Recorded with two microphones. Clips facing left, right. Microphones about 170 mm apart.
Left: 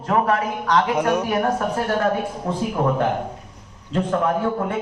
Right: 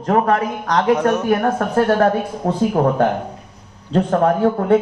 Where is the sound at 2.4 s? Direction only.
45° right (ahead or behind).